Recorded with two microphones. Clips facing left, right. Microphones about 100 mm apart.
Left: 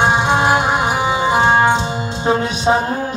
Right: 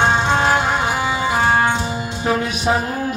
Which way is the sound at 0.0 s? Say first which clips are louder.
Left 2 dB; 15° left (ahead or behind).